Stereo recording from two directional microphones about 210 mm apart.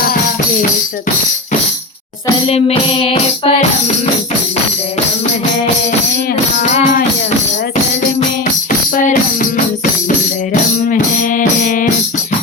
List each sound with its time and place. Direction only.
2.5 s music: 30° left (ahead or behind)
6.6 s music: 35° left (ahead or behind)
9.0 s music: 40° left (ahead or behind)
10.8 s music: 40° left (ahead or behind)